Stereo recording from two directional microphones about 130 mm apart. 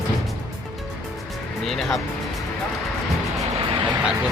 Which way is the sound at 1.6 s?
Centre (ahead or behind).